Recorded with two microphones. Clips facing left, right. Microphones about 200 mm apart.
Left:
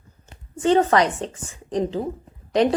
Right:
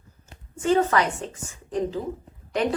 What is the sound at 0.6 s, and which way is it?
A woman's voice, 35° left (ahead or behind).